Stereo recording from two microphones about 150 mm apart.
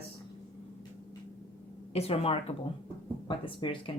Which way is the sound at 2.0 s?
40° left (ahead or behind).